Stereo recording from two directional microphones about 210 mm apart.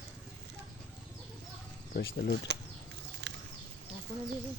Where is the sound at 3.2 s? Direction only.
55° right (ahead or behind).